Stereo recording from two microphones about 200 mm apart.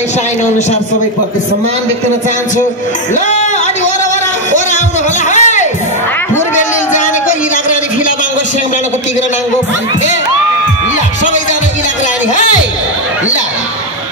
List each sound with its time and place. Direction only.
5.3 s music: 35° left (ahead or behind)